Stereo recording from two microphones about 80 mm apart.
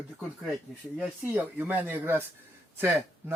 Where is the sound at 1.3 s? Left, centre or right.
Right.